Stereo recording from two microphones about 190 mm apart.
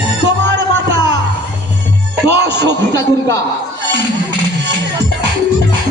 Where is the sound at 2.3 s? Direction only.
60° right (ahead or behind).